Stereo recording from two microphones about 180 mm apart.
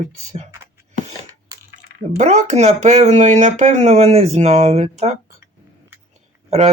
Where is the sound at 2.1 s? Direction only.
40° right (ahead or behind).